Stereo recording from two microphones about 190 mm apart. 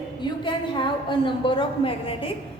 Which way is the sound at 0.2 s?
25° left (ahead or behind).